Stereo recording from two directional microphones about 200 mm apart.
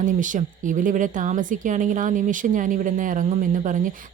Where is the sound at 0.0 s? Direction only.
40° right (ahead or behind).